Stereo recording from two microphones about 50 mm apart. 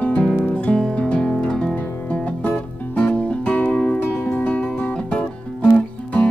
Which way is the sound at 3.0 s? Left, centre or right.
Left.